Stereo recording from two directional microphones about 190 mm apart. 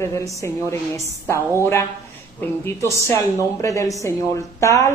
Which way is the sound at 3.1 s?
15° left (ahead or behind).